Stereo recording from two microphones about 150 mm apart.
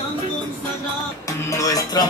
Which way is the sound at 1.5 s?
25° left (ahead or behind).